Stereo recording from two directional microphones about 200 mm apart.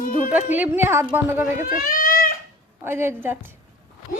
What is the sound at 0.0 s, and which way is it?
Speech, 45° left (ahead or behind).